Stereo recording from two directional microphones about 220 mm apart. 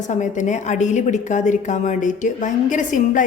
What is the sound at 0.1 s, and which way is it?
A woman's voice, 35° left (ahead or behind).